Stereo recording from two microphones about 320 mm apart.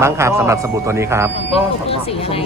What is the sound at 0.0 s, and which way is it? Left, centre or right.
A man's voice, centre.